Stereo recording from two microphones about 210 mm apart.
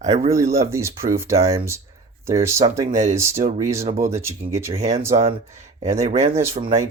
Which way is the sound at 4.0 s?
10° right (ahead or behind).